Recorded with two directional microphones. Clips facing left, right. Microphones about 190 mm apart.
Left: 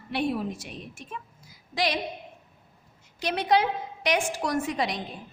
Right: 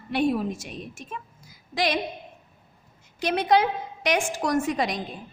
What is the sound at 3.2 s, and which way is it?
A woman's voice, 50° right (ahead or behind).